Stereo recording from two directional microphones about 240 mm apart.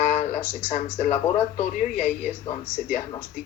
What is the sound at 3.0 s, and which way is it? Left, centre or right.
Speech, centre.